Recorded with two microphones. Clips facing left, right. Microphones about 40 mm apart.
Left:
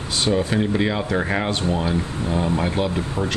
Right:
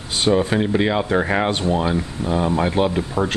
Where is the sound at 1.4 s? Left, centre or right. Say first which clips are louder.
Right 3 dB; right.